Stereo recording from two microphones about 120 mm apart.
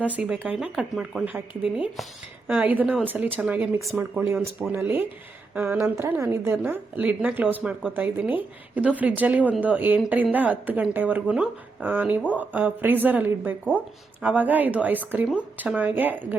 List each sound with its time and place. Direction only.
0.0 s a woman's voice: 10° right (ahead or behind)
3.8 s a woman's voice: 25° right (ahead or behind)